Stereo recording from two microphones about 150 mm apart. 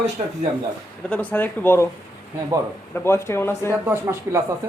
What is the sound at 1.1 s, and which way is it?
Speech, 10° left (ahead or behind).